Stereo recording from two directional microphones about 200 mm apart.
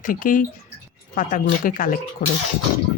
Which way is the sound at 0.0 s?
40° left (ahead or behind).